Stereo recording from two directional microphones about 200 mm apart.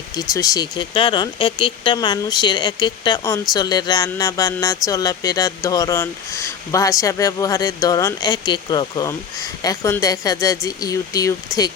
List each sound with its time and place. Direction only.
0.2 s speech: 15° left (ahead or behind)